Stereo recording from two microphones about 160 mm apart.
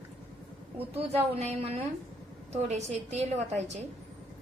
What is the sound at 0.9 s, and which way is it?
A woman's voice, 40° right (ahead or behind).